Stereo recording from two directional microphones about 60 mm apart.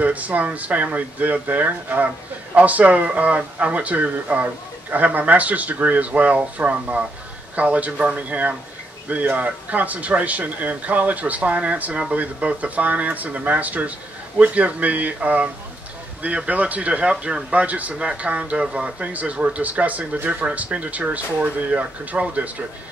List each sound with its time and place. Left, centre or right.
0.0 s speech: right